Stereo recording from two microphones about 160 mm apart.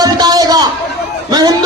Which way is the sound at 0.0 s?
25° right (ahead or behind).